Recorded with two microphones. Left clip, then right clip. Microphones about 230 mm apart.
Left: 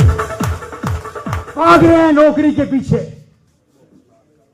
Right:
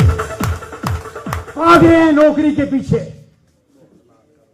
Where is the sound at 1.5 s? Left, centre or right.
Left.